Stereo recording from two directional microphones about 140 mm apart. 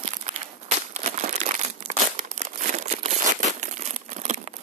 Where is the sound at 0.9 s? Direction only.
55° right (ahead or behind).